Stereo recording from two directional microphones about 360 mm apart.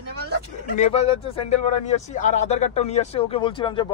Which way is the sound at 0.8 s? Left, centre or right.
Centre.